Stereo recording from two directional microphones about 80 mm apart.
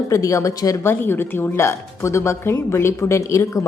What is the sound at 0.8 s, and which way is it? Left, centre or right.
A woman's voice, left.